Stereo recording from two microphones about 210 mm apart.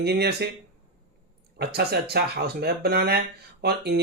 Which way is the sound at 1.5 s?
50° right (ahead or behind).